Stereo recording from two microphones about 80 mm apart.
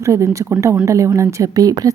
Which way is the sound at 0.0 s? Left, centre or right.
Right.